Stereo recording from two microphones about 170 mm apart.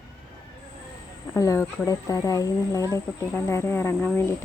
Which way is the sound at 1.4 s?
20° left (ahead or behind).